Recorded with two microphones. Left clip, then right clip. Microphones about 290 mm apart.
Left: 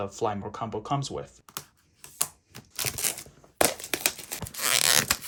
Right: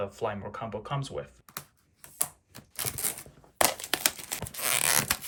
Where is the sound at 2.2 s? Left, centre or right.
Centre.